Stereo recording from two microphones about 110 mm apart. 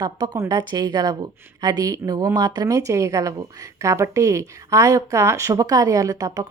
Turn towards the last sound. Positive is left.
turn(degrees=-30)  # may be behind; listen again after turning